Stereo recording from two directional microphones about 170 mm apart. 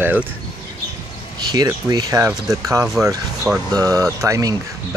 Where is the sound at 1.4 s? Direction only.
25° right (ahead or behind).